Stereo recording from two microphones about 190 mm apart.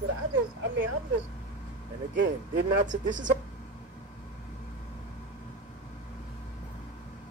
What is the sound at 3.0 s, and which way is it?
Speech, 40° right (ahead or behind).